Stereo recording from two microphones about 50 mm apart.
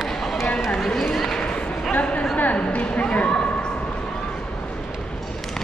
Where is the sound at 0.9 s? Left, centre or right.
Centre.